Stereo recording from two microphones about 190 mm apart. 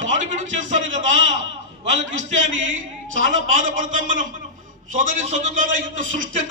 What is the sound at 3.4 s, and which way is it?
A man's voice, 45° right (ahead or behind).